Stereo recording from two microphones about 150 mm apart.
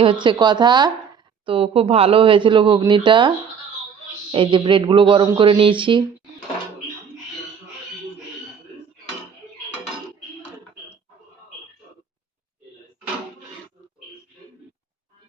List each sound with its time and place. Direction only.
0.0 s speech: 35° right (ahead or behind)
1.5 s speech: 40° right (ahead or behind)